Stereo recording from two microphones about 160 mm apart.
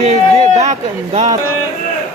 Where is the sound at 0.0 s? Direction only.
45° right (ahead or behind).